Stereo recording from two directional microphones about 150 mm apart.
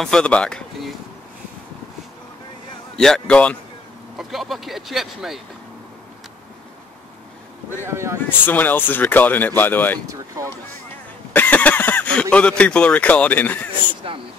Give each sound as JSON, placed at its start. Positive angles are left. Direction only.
{"t": 0.0, "sound": "speech", "side_deg": 5}
{"t": 3.0, "sound": "speech", "side_deg": 5}
{"t": 7.8, "sound": "speech", "side_deg": -15}
{"t": 8.5, "sound": "speech", "side_deg": 10}
{"t": 10.0, "sound": "speech", "side_deg": -20}
{"t": 11.3, "sound": "speech", "side_deg": 10}
{"t": 14.1, "sound": "speech", "side_deg": -35}